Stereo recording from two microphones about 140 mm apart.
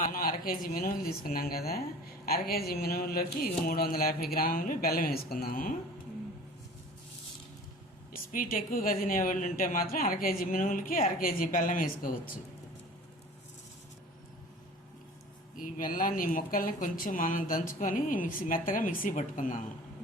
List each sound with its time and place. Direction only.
0.0 s speech: 90° left
8.1 s speech: 90° left
15.5 s speech: 75° left (ahead or behind)